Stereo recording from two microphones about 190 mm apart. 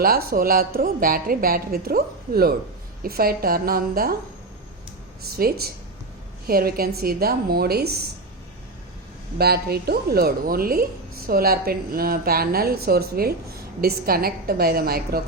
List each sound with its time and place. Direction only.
0.0 s a woman's voice: 50° right (ahead or behind)
5.2 s a woman's voice: 55° right (ahead or behind)
9.4 s a woman's voice: 55° right (ahead or behind)